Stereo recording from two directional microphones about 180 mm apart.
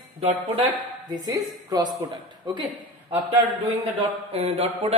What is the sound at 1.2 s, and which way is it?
Speech, 20° right (ahead or behind).